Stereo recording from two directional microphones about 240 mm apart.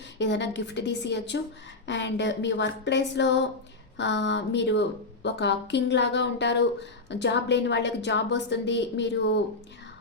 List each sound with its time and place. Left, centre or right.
0.2 s speech: left